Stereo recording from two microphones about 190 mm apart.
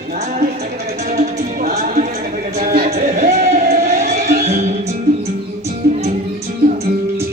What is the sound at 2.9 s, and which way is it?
Music, 35° right (ahead or behind).